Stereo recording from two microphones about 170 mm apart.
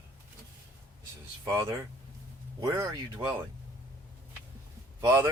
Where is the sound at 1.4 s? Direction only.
20° right (ahead or behind).